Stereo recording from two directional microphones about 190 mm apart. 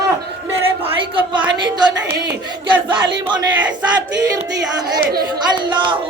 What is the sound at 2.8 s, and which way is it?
Speech, 25° right (ahead or behind).